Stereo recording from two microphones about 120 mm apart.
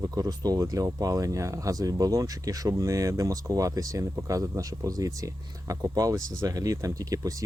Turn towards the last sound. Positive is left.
turn(degrees=-30)  # may be behind; listen again after turning